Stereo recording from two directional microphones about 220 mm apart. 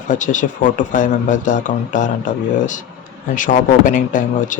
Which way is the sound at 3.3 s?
35° left (ahead or behind).